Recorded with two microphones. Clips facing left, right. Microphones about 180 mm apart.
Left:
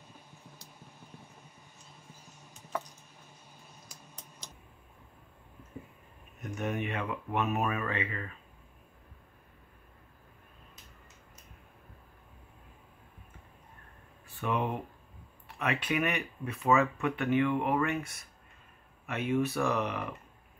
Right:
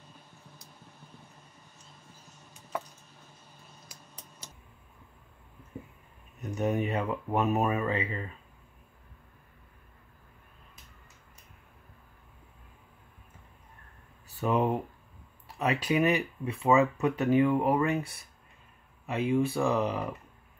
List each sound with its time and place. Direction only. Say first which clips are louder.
3.9 s a sound: even; 10° right (ahead or behind)
6.4 s speech: right 5 dB; 35° right (ahead or behind)
14.4 s speech: right 5 dB; 35° right (ahead or behind)
16.6 s speech: right 3 dB; 15° right (ahead or behind)
16.9 s speech: right 4 dB; 40° right (ahead or behind)